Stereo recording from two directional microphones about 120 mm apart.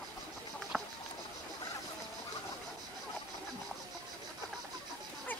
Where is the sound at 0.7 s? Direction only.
5° left (ahead or behind).